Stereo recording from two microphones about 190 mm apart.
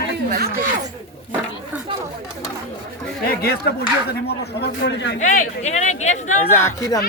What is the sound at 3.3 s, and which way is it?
Speech, 55° left (ahead or behind).